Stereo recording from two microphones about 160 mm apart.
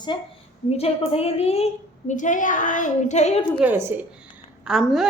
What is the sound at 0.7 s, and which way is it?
A woman's voice, 40° left (ahead or behind).